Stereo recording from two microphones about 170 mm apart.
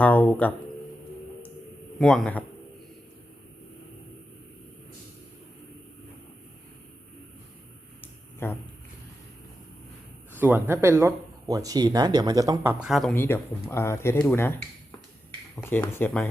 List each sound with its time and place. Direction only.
0.0 s a sound: 10° left (ahead or behind)
2.0 s a man's voice: centre (ahead or behind)
10.3 s speech: 10° right (ahead or behind)
12.8 s a man's voice: centre (ahead or behind)
13.1 s speech: 15° left (ahead or behind)
15.6 s speech: 10° left (ahead or behind)